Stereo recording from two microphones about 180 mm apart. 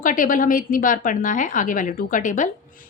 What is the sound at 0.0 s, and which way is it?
A woman's voice, 50° left (ahead or behind).